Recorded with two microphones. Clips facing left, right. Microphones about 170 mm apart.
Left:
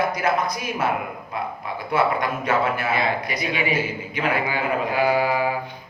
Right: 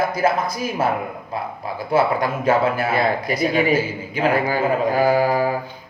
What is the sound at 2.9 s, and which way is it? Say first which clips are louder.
A man's voice: right 4 dB; 45° right (ahead or behind).